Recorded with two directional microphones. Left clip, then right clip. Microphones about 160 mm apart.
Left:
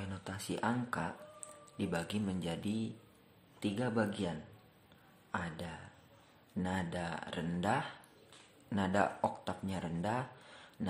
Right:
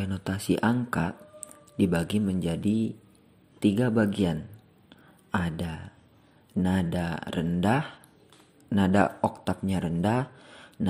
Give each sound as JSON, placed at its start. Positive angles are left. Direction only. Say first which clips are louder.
{"t": 0.0, "sound": "speech", "louder": "right 11 dB", "side_deg": -35}